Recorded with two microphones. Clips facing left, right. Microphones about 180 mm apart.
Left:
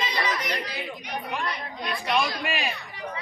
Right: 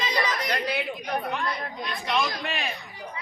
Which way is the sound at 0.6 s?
60° right (ahead or behind).